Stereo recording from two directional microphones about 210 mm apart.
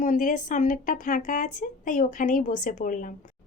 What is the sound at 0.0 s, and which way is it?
A woman's voice, 40° left (ahead or behind).